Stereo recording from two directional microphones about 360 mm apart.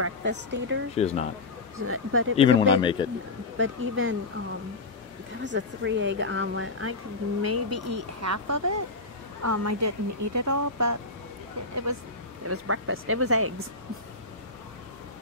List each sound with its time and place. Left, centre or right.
0.0 s speech: right
0.9 s speech: centre
1.9 s speech: right
2.3 s speech: centre
3.5 s speech: right
5.4 s speech: right
12.4 s speech: right